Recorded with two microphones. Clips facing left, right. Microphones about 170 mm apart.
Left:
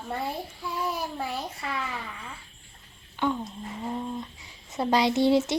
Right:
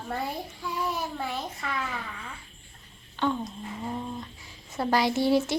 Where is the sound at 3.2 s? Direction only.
10° left (ahead or behind).